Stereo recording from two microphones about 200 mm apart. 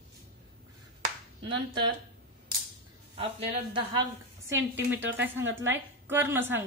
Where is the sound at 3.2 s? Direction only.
25° right (ahead or behind).